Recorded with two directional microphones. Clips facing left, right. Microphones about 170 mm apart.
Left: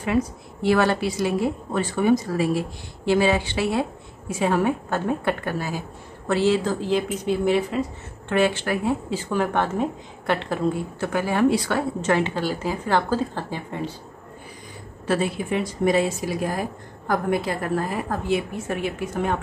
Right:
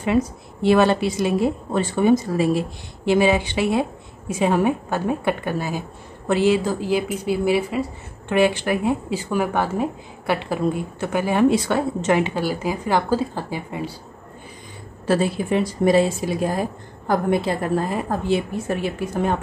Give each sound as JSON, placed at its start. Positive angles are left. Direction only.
{"t": 0.0, "sound": "a woman's voice", "side_deg": -25}
{"t": 15.0, "sound": "a woman's voice", "side_deg": -35}